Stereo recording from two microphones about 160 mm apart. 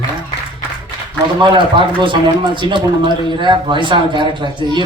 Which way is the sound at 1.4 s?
30° right (ahead or behind).